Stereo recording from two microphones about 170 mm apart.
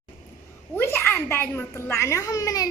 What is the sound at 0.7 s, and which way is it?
A child's voice, 10° left (ahead or behind).